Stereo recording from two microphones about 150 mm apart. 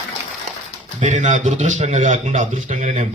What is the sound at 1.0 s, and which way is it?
Speech, 55° right (ahead or behind).